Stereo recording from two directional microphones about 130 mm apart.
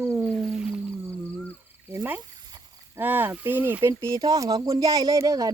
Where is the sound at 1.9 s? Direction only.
15° right (ahead or behind).